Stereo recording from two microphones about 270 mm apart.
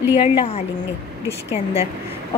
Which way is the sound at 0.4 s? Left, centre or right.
Left.